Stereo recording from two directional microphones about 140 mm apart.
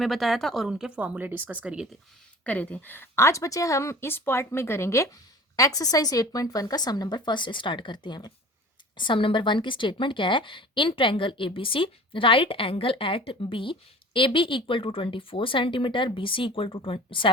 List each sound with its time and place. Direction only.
0.0 s a woman's voice: centre (ahead or behind)
2.4 s a woman's voice: 10° left (ahead or behind); by 17.3 s 35° left (ahead or behind)